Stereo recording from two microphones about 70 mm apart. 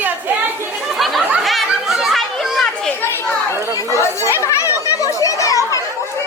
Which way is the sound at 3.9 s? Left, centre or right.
Left.